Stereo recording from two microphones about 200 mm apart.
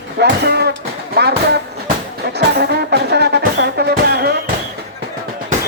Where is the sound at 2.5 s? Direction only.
55° right (ahead or behind).